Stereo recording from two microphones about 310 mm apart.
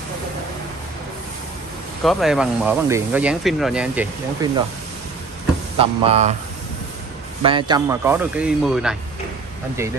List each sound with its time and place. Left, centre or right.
2.0 s speech: centre
5.8 s speech: centre
7.4 s speech: centre